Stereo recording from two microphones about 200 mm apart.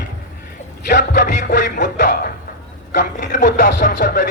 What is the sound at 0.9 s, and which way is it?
Music, 60° left (ahead or behind).